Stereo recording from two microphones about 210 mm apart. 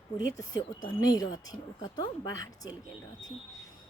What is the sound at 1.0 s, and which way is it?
A woman's voice, 15° left (ahead or behind).